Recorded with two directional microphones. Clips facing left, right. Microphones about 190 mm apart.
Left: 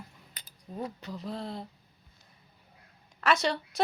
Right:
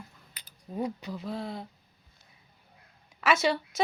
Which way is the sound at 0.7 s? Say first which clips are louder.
Right 4 dB; 15° right (ahead or behind).